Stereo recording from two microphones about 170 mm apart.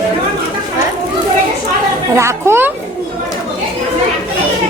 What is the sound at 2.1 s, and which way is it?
Speech, 15° right (ahead or behind).